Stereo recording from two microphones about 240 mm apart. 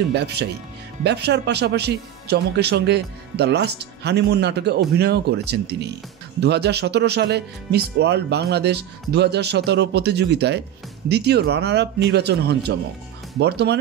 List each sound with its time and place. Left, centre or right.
0.1 s a man's voice: right